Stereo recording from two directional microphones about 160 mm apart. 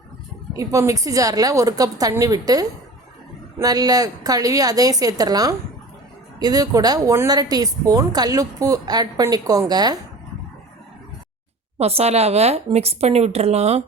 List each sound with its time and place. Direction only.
0.5 s speech: 20° right (ahead or behind)
11.8 s speech: 40° right (ahead or behind)